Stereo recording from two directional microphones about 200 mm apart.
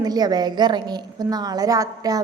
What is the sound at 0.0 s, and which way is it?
A woman's voice, 20° right (ahead or behind).